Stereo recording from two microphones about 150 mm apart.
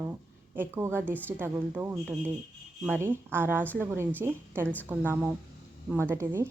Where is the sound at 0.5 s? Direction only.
15° right (ahead or behind).